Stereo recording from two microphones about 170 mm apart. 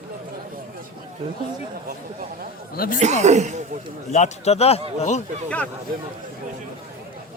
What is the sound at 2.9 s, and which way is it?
Speech, 40° right (ahead or behind).